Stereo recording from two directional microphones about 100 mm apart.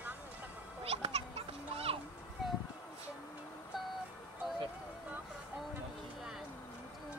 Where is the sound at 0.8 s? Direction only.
90° right.